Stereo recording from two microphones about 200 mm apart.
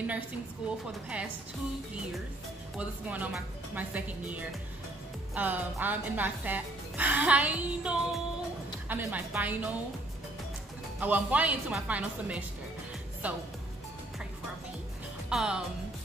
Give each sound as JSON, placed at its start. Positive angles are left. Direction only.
{"t": 3.1, "sound": "a woman's voice", "side_deg": -10}
{"t": 11.0, "sound": "a woman's voice", "side_deg": -10}
{"t": 15.2, "sound": "speech", "side_deg": -5}